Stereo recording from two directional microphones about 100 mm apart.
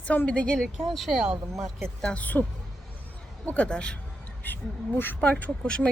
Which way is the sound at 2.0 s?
10° left (ahead or behind).